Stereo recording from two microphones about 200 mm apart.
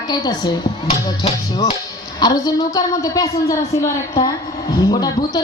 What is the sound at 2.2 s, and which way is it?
A woman's voice, 20° left (ahead or behind).